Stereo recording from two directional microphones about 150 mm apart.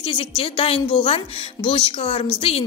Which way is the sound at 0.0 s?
35° left (ahead or behind).